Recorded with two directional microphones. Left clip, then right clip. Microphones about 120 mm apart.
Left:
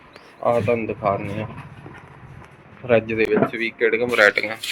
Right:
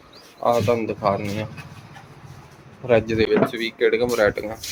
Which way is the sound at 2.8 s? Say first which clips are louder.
Even; 15° right (ahead or behind).